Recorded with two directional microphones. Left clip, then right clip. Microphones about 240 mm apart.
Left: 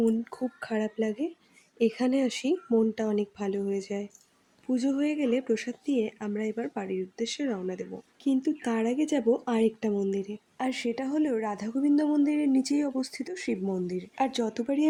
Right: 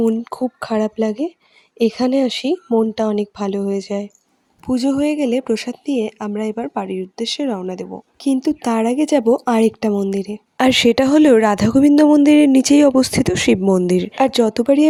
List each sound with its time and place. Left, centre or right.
0.0 s speech: right